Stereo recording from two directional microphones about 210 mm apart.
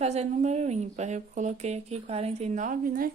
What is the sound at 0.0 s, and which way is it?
Speech, 30° right (ahead or behind).